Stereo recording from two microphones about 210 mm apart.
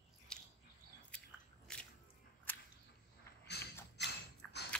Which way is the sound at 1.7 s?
5° left (ahead or behind).